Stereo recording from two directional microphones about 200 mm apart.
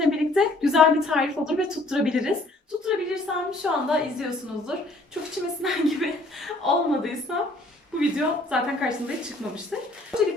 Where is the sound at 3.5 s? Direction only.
5° right (ahead or behind).